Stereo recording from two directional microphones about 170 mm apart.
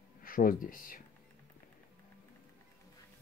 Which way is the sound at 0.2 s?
55° left (ahead or behind).